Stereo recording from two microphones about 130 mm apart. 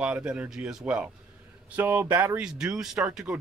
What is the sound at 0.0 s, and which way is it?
Speech, 10° right (ahead or behind).